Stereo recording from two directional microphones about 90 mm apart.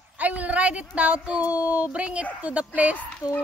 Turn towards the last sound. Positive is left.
turn(degrees=50)  # may be behind; listen again after turning